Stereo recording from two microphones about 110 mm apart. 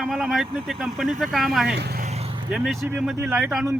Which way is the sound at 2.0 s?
70° right (ahead or behind).